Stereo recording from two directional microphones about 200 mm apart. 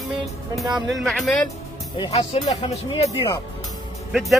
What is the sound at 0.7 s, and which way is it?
Speech, centre (ahead or behind).